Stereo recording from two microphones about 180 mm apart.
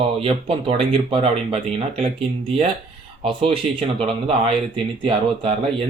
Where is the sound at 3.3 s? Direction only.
30° right (ahead or behind).